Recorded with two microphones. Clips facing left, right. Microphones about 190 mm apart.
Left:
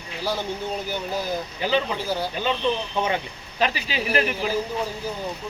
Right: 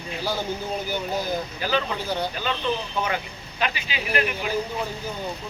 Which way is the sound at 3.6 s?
35° left (ahead or behind).